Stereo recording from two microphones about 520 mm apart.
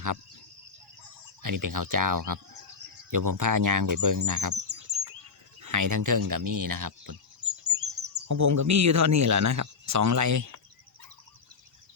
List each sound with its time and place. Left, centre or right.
1.4 s speech: right